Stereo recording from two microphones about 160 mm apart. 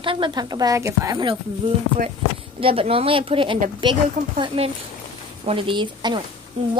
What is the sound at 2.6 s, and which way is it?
A woman's voice, 35° right (ahead or behind).